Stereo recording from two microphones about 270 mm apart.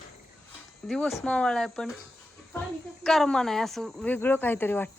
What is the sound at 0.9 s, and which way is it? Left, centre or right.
Speech, centre.